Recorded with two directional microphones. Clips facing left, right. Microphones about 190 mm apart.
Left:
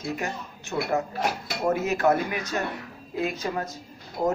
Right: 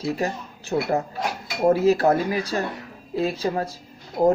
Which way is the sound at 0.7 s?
40° right (ahead or behind).